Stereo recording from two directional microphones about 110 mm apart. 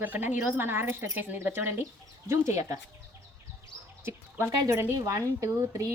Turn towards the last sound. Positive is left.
turn(degrees=-30)  # may be behind; listen again after turning